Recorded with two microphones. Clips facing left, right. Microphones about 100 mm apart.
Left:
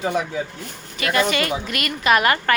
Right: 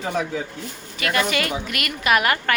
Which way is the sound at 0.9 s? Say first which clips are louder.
Left 2 dB; centre (ahead or behind).